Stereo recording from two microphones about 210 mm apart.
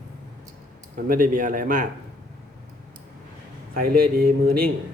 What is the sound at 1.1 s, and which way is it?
Speech, 40° right (ahead or behind).